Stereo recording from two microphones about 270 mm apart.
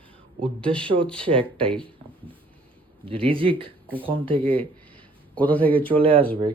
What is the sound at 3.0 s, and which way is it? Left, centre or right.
Speech, centre.